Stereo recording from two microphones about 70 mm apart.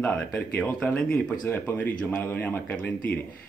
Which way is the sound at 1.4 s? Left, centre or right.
Left.